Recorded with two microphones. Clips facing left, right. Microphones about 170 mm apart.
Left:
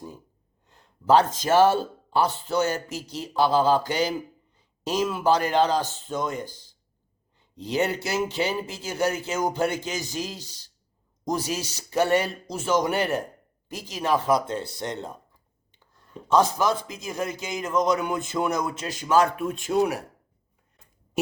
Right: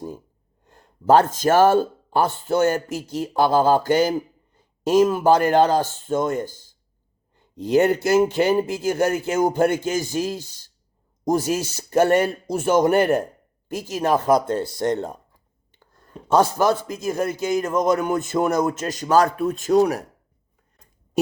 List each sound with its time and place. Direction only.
0.6 s a man's voice: 50° right (ahead or behind)